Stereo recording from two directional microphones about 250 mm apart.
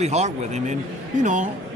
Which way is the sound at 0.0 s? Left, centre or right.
Right.